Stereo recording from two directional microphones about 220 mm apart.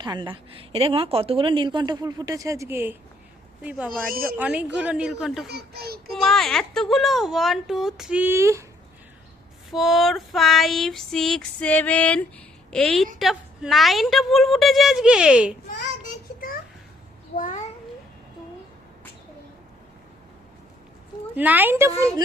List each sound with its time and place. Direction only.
0.0 s a woman's voice: 20° right (ahead or behind); by 5.5 s centre (ahead or behind)
5.5 s a child's voice: 45° right (ahead or behind)
6.1 s a woman's voice: centre (ahead or behind)
9.7 s a woman's voice: centre (ahead or behind)
17.3 s a child's voice: 35° left (ahead or behind)
21.3 s a woman's voice: 10° right (ahead or behind)